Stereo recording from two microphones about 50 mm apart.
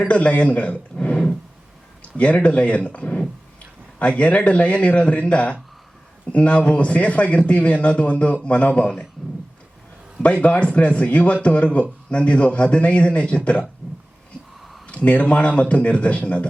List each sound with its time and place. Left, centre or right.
0.1 s a man's voice: left
10.2 s a man's voice: left
14.8 s a man's voice: left